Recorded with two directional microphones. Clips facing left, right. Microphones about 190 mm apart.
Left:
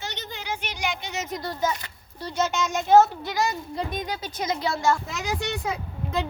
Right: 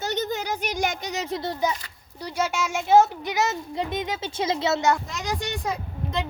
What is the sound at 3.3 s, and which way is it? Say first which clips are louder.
A child's voice: right 1 dB; 20° right (ahead or behind).